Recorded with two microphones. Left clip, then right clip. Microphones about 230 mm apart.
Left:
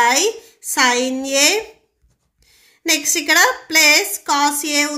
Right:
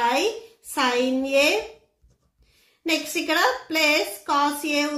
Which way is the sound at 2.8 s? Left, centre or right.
Left.